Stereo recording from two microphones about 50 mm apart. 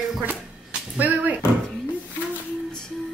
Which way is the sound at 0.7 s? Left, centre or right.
Right.